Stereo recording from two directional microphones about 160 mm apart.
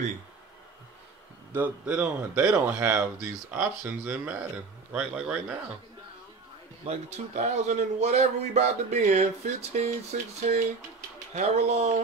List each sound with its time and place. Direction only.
1.5 s speech: 10° right (ahead or behind)
6.9 s a man's voice: 45° right (ahead or behind)